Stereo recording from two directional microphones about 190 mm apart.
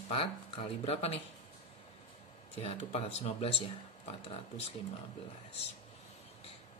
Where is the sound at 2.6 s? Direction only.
30° left (ahead or behind).